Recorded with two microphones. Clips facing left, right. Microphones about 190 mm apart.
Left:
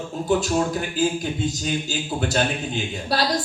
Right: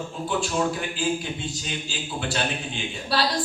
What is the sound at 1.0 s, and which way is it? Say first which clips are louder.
A man's voice: left 7 dB; 40° left (ahead or behind).